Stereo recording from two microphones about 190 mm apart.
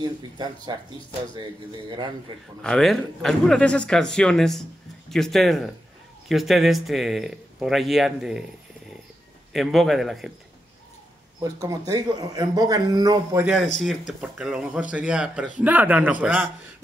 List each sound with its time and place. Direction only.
0.0 s a man's voice: 25° right (ahead or behind)
1.9 s a man's voice: 25° right (ahead or behind)
2.6 s speech: centre (ahead or behind)
9.5 s speech: centre (ahead or behind)
11.6 s a man's voice: 20° right (ahead or behind)
13.7 s speech: centre (ahead or behind)